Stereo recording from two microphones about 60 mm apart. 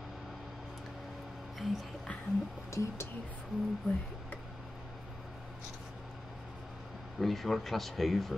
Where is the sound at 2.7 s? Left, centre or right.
Left.